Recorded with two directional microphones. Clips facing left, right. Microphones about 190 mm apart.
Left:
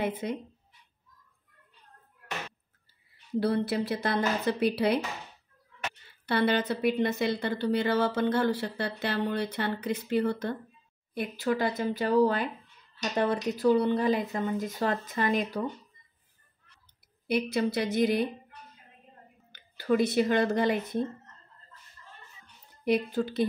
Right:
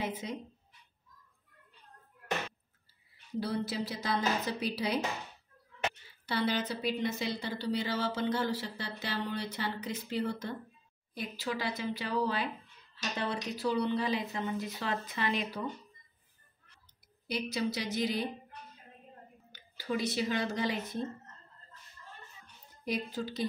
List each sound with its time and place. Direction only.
0.0 s a woman's voice: 60° left (ahead or behind)
3.3 s a woman's voice: 60° left (ahead or behind)
6.2 s a woman's voice: 60° left (ahead or behind)
17.3 s a woman's voice: 60° left (ahead or behind)
19.5 s speech: 55° left (ahead or behind)
22.8 s a woman's voice: 60° left (ahead or behind)